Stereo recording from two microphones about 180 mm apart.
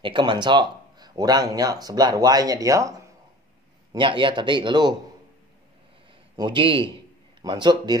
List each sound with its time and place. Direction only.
0.0 s speech: 25° right (ahead or behind)
3.9 s speech: 30° right (ahead or behind)
6.3 s a man's voice: 25° right (ahead or behind)